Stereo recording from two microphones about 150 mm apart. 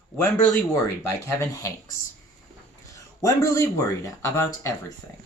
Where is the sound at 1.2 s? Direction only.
20° left (ahead or behind).